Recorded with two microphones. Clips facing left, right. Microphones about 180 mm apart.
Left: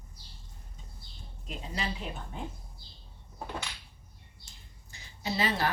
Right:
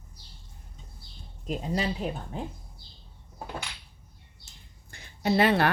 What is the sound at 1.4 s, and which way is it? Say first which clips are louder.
Speech: right 8 dB; 45° right (ahead or behind).